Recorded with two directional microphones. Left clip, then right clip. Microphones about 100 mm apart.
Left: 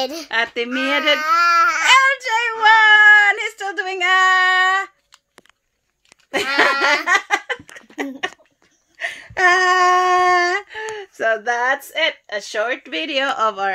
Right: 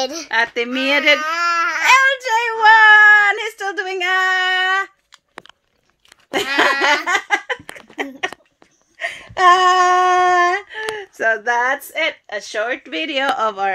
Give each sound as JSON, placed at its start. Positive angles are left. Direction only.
{"t": 0.3, "sound": "speech", "side_deg": 15}
{"t": 0.7, "sound": "speech", "side_deg": 0}
{"t": 6.3, "sound": "laughter", "side_deg": 0}
{"t": 8.9, "sound": "speech", "side_deg": 0}
{"t": 11.0, "sound": "speech", "side_deg": 0}